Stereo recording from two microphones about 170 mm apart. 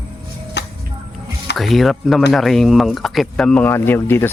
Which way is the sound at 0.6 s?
90° left.